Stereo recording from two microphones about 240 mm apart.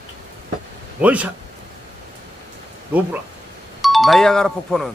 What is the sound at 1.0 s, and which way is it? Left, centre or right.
Speech, centre.